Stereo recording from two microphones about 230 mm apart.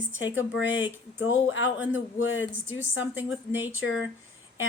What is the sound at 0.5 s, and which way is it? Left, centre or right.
A woman's voice, left.